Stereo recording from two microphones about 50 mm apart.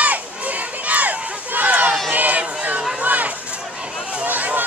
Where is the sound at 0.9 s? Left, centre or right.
Right.